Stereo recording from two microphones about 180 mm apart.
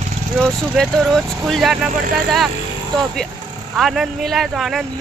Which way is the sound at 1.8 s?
45° right (ahead or behind).